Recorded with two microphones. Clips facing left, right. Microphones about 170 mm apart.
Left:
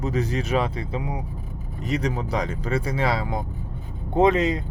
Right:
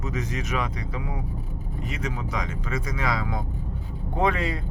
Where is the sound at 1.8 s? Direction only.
35° left (ahead or behind); by 4.6 s 20° left (ahead or behind).